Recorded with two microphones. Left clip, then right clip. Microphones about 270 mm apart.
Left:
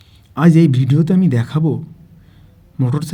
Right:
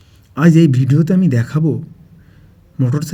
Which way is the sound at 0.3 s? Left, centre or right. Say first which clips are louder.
Right 1 dB; centre.